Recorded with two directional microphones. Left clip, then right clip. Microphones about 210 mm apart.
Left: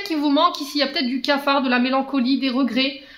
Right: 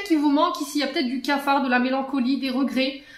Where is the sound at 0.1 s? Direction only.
45° left (ahead or behind).